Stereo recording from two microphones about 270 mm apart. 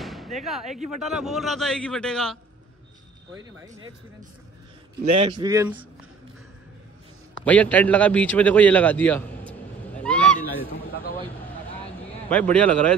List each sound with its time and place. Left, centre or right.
0.0 s a sound: centre
1.0 s a man's voice: centre
3.3 s speech: centre
5.1 s speech: centre
7.4 s a man's voice: centre
9.5 s honk: centre
10.4 s speech: left
12.3 s a man's voice: centre